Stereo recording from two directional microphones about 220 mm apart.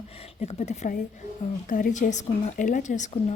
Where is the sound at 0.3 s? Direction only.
30° left (ahead or behind).